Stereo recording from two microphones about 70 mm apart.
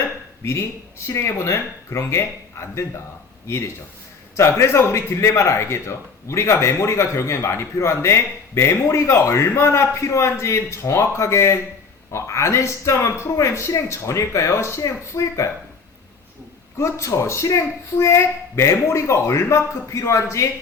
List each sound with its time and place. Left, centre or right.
0.4 s a man's voice: left
16.7 s speech: left